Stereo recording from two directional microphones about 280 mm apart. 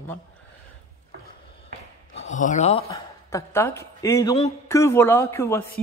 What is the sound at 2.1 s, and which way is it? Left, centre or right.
Speech, left.